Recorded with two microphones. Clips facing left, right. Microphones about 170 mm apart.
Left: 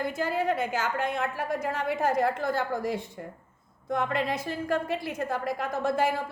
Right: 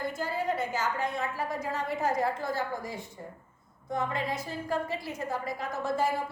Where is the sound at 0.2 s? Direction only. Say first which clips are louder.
Left 4 dB; 75° left (ahead or behind).